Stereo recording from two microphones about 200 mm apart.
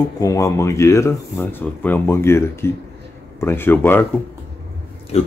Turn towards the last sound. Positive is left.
turn(degrees=30)  # may be behind; listen again after turning